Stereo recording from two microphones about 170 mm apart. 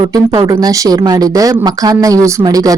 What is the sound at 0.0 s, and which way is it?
Speech, 25° right (ahead or behind).